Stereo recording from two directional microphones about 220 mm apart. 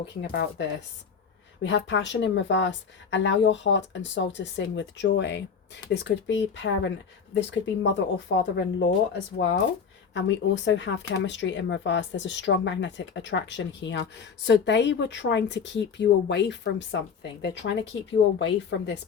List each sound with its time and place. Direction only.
0.0 s speech: 45° left (ahead or behind)
18.3 s speech: 50° left (ahead or behind)